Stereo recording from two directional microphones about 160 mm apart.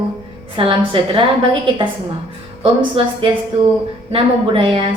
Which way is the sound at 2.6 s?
35° right (ahead or behind).